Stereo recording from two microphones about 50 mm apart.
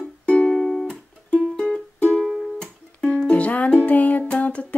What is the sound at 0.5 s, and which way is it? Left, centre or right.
Music, centre.